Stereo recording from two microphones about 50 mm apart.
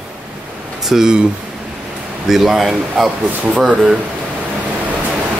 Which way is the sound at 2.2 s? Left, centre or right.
Centre.